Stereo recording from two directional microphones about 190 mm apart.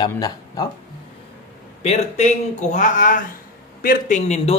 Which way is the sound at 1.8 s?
35° left (ahead or behind).